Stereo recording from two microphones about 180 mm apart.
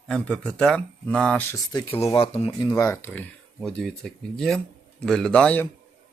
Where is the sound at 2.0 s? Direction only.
30° left (ahead or behind).